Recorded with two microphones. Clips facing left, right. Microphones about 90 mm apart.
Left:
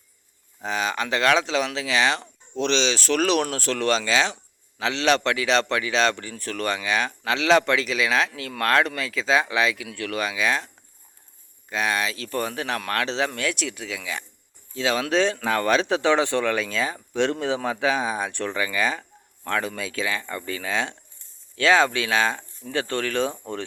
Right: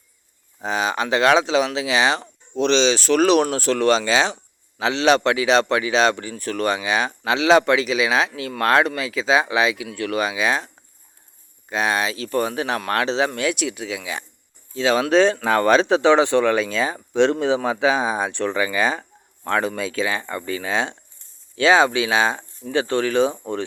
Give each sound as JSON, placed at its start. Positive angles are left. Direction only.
{"t": 0.6, "sound": "a man's voice", "side_deg": -20}
{"t": 11.7, "sound": "a man's voice", "side_deg": -25}
{"t": 14.7, "sound": "a man's voice", "side_deg": -30}